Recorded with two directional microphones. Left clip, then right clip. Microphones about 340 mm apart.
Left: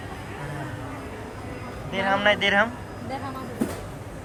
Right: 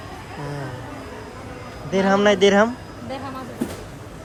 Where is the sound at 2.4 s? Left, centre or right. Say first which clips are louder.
Right 5 dB; right.